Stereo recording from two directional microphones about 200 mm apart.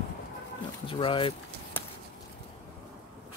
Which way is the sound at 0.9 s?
25° left (ahead or behind).